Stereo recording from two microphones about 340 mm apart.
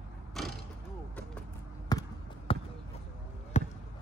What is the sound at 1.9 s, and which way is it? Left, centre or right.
Basketball bounce, centre.